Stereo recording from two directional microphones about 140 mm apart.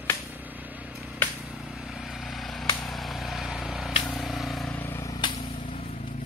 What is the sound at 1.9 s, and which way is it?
Vehicle, 5° right (ahead or behind).